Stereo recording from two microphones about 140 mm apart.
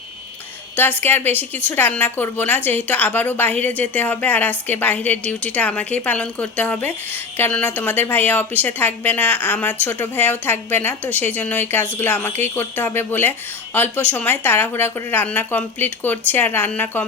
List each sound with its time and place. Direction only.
0.8 s a woman's voice: 15° left (ahead or behind)